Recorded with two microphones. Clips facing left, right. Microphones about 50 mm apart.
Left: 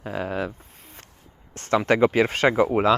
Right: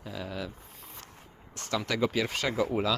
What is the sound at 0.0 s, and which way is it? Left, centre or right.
Speech, left.